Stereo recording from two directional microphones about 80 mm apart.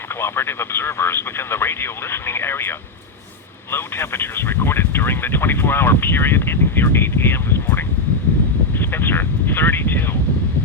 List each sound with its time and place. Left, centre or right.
0.2 s speech: left